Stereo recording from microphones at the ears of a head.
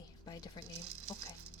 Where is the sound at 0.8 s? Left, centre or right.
Right.